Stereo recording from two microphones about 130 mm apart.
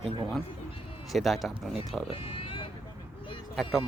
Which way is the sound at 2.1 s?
45° left (ahead or behind).